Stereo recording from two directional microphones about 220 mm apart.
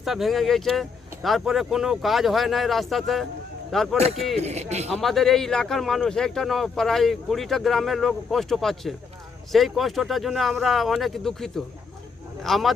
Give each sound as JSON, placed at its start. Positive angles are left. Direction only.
{"t": 0.0, "sound": "speech", "side_deg": 0}
{"t": 3.9, "sound": "speech", "side_deg": -30}
{"t": 4.9, "sound": "speech", "side_deg": 0}